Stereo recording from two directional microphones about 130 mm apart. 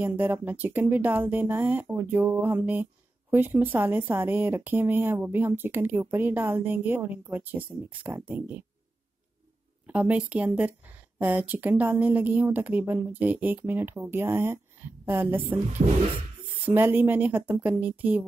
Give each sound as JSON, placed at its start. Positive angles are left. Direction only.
{"t": 0.0, "sound": "speech", "side_deg": -15}
{"t": 9.8, "sound": "speech", "side_deg": -10}
{"t": 15.8, "sound": "music", "side_deg": -50}
{"t": 16.6, "sound": "speech", "side_deg": -15}